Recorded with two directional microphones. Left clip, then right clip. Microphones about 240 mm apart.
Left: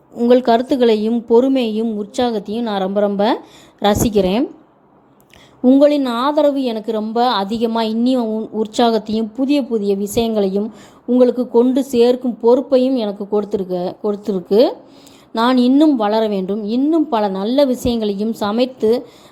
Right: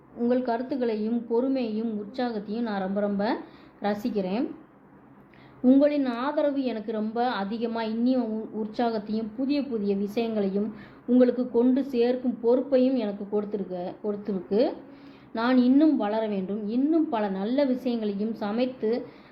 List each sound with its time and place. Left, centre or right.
0.2 s a woman's voice: left
5.6 s a woman's voice: left